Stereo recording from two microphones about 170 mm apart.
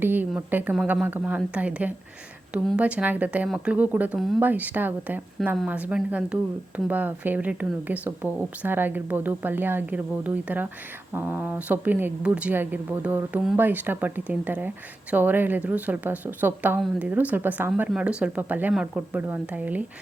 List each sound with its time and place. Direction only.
0.0 s speech: 10° right (ahead or behind)